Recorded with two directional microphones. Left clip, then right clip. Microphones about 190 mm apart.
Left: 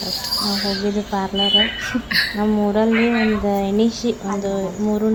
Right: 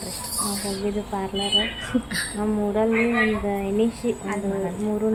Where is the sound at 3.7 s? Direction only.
20° left (ahead or behind).